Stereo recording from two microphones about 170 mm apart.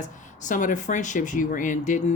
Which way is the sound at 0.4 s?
50° left (ahead or behind).